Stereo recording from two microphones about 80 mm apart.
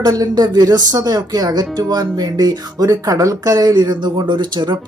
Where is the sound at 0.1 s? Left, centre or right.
Right.